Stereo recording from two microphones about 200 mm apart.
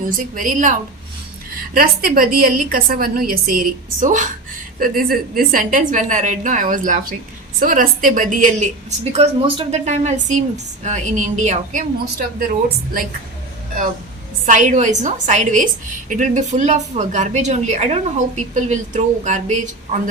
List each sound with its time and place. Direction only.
0.0 s a woman's voice: 45° right (ahead or behind)
12.4 s a woman's voice: 45° right (ahead or behind)
14.4 s a woman's voice: 40° right (ahead or behind)